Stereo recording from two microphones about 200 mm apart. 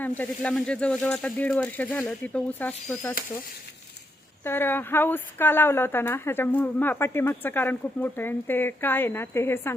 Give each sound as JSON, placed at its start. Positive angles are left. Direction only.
{"t": 0.0, "sound": "speech", "side_deg": 10}
{"t": 4.4, "sound": "speech", "side_deg": 10}